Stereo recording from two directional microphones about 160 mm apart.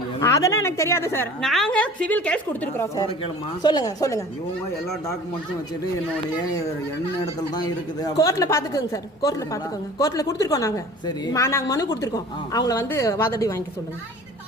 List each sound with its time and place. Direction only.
0.2 s a woman's voice: 20° left (ahead or behind)
1.4 s a woman's voice: 5° left (ahead or behind); by 4.2 s 20° left (ahead or behind)
7.5 s a woman's voice: 25° left (ahead or behind)